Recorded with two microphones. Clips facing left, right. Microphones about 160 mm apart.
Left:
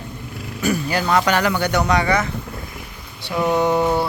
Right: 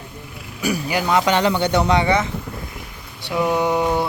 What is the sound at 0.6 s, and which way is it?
Speech, 10° right (ahead or behind).